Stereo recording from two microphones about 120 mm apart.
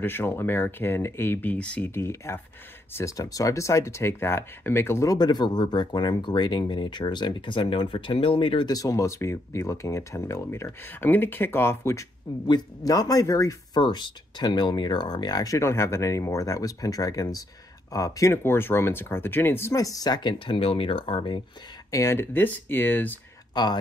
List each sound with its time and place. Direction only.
0.0 s speech: 20° left (ahead or behind); by 8.7 s 45° left (ahead or behind)
8.7 s speech: 30° left (ahead or behind)
13.7 s speech: 40° left (ahead or behind)
21.9 s speech: 25° left (ahead or behind)
23.5 s speech: 35° left (ahead or behind)